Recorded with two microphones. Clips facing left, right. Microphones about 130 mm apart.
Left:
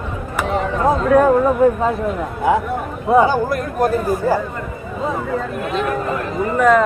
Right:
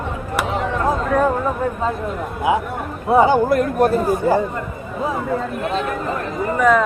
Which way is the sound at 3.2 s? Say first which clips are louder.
Right 3 dB; 25° right (ahead or behind).